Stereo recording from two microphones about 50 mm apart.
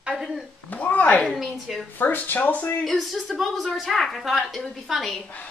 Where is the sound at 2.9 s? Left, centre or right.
Centre.